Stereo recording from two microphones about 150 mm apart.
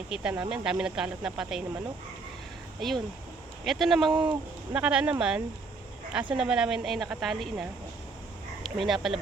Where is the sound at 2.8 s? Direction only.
Centre (ahead or behind).